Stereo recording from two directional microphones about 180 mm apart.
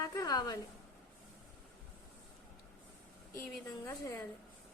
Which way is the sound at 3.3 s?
15° left (ahead or behind).